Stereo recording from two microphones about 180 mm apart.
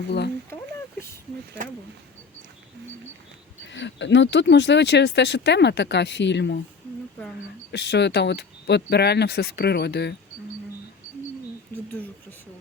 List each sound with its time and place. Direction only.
3.6 s speech: 85° left
7.7 s speech: 70° left (ahead or behind)